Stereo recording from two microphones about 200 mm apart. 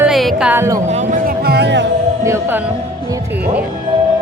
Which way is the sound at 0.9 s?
40° right (ahead or behind).